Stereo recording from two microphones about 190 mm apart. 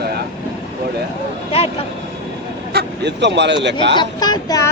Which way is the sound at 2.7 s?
60° right (ahead or behind).